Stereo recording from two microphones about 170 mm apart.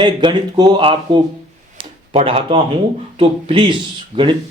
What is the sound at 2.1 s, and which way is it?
Speech, 35° right (ahead or behind).